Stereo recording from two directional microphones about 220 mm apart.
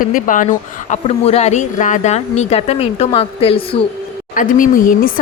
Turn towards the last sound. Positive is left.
turn(degrees=40)  # may be behind; listen again after turning